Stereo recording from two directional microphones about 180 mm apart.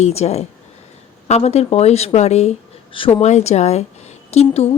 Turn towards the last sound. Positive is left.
turn(degrees=35)  # may be behind; listen again after turning